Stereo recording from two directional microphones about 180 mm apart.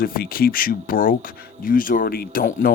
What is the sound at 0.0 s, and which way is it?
Speech, 55° left (ahead or behind).